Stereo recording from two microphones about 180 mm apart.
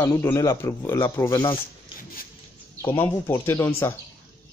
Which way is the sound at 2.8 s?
15° left (ahead or behind).